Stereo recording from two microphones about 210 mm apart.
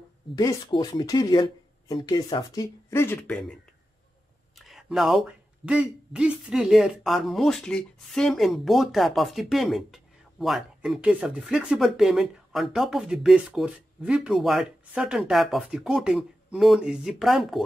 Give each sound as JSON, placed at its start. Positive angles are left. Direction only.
{"t": 0.4, "sound": "speech", "side_deg": 20}
{"t": 4.6, "sound": "speech", "side_deg": 0}